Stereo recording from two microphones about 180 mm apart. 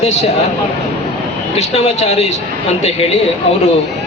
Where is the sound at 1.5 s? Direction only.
35° left (ahead or behind).